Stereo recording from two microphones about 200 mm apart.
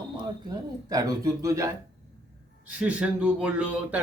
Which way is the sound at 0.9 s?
20° right (ahead or behind).